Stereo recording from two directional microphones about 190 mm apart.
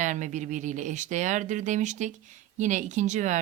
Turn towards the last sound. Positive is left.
turn(degrees=-40)  # may be behind; listen again after turning